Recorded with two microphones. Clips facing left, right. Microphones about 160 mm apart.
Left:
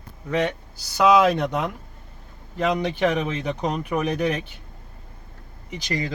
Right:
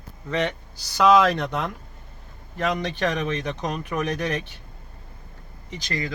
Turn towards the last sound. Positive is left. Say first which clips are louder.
# left 3 dB
turn(degrees=15)  # may be behind; listen again after turning